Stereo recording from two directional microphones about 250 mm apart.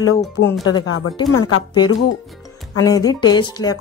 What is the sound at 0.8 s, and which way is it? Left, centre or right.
Speech, left.